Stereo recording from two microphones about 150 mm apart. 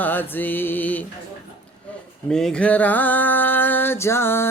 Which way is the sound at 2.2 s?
5° left (ahead or behind).